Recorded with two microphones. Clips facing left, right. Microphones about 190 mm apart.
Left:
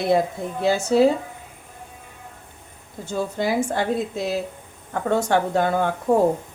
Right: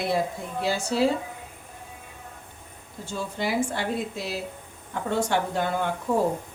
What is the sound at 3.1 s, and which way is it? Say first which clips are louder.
Speech: left 5 dB; 50° left (ahead or behind).